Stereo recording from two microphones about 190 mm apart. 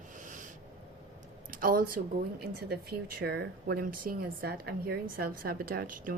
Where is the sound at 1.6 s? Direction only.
50° right (ahead or behind).